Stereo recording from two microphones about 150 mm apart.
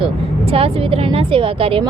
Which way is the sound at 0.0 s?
40° right (ahead or behind).